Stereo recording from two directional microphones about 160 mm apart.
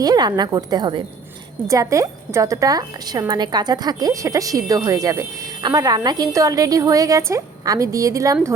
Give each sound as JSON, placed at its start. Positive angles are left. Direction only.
{"t": 0.0, "sound": "a woman's voice", "side_deg": -25}